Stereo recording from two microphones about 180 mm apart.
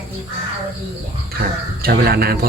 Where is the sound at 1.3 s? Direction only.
60° right (ahead or behind).